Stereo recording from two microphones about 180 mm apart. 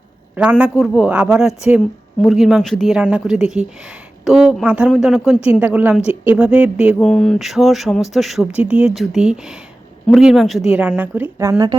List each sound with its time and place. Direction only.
0.6 s speech: 5° right (ahead or behind); by 11.8 s 20° right (ahead or behind)